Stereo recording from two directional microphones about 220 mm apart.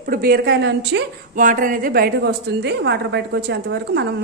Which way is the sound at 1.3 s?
40° right (ahead or behind).